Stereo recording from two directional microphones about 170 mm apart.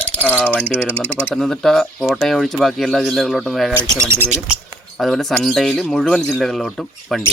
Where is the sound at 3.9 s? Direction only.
15° right (ahead or behind).